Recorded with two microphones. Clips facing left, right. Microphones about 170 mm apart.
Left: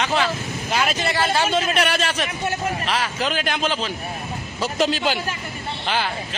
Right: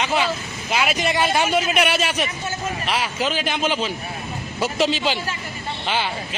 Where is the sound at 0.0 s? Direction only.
10° right (ahead or behind).